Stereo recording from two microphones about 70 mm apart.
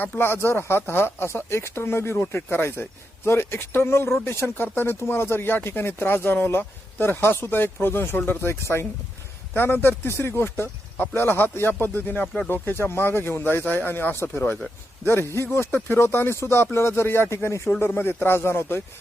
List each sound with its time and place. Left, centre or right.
0.0 s speech: left